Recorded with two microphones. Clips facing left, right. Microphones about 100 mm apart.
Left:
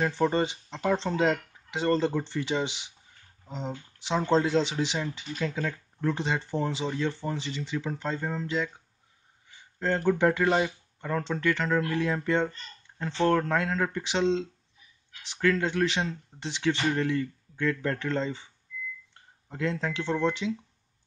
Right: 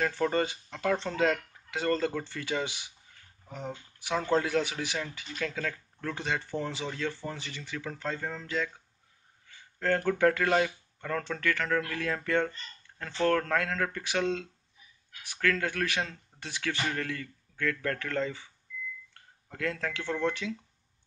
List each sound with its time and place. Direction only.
0.0 s speech: 20° left (ahead or behind)